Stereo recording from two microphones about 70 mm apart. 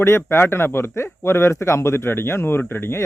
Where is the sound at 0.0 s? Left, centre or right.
Left.